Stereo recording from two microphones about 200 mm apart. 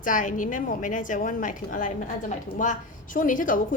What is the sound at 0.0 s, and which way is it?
A woman's voice, 40° left (ahead or behind).